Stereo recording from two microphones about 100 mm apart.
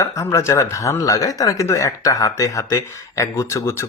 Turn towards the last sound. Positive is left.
turn(degrees=30)  # may be behind; listen again after turning